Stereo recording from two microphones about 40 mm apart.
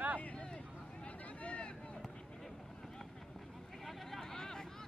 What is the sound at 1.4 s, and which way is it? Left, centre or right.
Vehicle, left.